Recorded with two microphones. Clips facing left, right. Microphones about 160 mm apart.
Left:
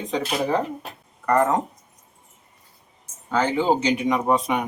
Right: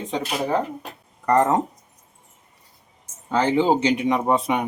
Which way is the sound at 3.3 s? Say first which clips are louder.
Right 2 dB; 30° right (ahead or behind).